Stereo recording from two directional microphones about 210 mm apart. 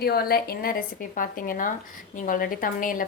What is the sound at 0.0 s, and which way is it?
A woman's voice, 45° left (ahead or behind).